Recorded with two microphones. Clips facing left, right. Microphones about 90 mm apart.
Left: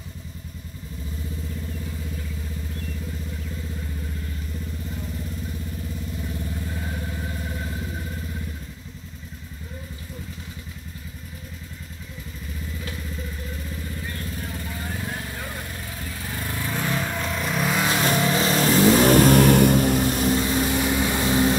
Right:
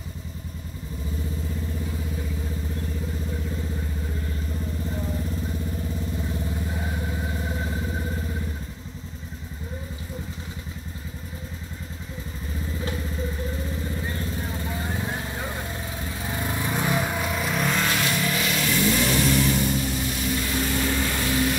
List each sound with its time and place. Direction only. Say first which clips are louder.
13.8 s vehicle: right 3 dB; 25° right (ahead or behind); by 17.8 s centre (ahead or behind)
18.0 s vehicle: left 4 dB; 35° left (ahead or behind)
20.3 s vehicle: left 4 dB; 20° left (ahead or behind)